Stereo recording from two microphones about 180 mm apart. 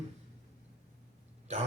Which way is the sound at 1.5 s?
40° right (ahead or behind).